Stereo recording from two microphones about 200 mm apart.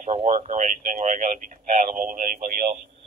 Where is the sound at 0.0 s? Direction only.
35° right (ahead or behind).